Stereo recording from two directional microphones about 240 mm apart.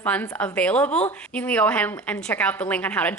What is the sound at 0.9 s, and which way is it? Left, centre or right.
Speech, left.